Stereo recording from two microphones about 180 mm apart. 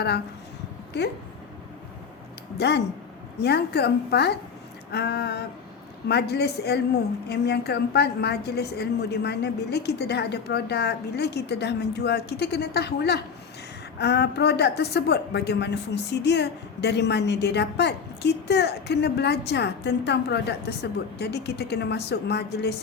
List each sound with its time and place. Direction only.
2.6 s a woman's voice: 65° left (ahead or behind)